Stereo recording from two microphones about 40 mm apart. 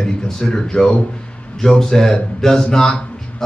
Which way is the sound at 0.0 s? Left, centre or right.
Centre.